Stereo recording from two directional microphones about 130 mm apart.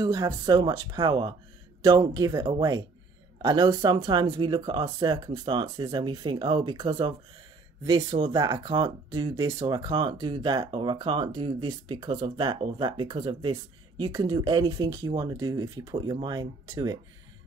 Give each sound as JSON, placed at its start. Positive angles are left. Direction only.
{"t": 0.0, "sound": "speech", "side_deg": -30}